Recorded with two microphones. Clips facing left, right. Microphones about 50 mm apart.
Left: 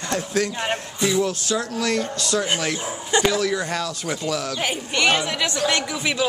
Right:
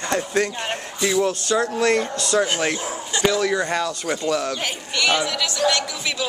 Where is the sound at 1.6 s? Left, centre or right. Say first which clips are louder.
Right 5 dB; right.